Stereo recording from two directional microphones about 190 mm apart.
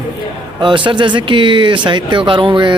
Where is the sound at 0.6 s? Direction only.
25° right (ahead or behind).